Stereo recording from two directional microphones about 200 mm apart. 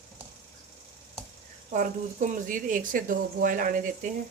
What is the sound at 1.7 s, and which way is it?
Speech, 40° right (ahead or behind).